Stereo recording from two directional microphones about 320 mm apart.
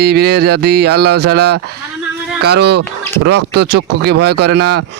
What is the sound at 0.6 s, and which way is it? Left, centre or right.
Speech, right.